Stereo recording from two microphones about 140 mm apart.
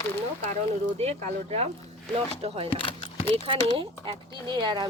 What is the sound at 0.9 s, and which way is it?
Speech, 50° right (ahead or behind).